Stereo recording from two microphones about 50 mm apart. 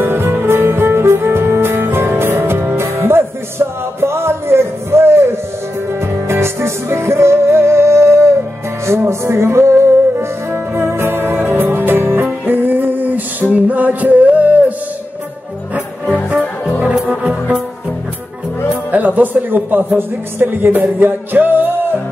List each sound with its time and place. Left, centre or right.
0.0 s music: right
17.1 s music: centre
18.9 s music: right
20.0 s speech: right
21.0 s music: right